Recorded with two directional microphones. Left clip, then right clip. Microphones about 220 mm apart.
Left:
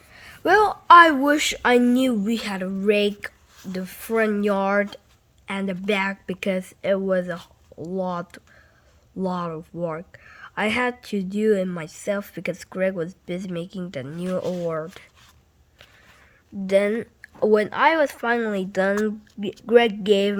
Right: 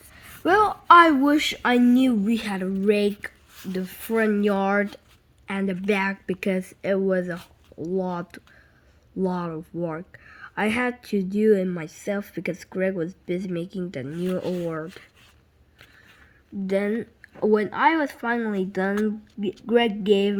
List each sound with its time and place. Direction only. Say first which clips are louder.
0.2 s speech: left 2 dB; 25° left (ahead or behind)
14.4 s speech: left 2 dB; 15° left (ahead or behind)
16.6 s speech: left 5 dB; 35° left (ahead or behind)